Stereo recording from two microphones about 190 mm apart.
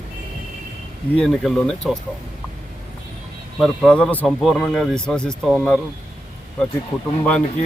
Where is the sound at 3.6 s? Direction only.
5° left (ahead or behind).